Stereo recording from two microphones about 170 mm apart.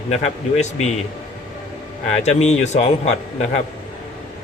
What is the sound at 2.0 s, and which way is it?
A man's voice, 40° left (ahead or behind).